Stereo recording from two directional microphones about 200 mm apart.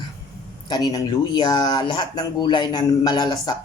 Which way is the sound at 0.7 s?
20° left (ahead or behind).